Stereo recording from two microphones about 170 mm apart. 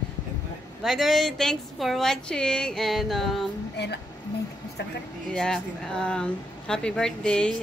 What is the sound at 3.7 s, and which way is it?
Speech, 85° left.